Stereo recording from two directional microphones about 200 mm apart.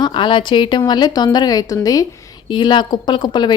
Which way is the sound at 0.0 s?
25° left (ahead or behind).